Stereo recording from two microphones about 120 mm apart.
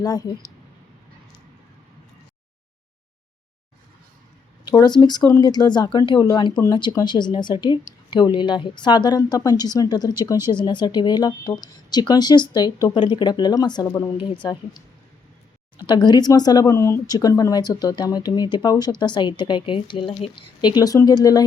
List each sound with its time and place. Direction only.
0.0 s speech: 30° left (ahead or behind)
4.6 s speech: 35° left (ahead or behind)
15.9 s speech: 35° left (ahead or behind)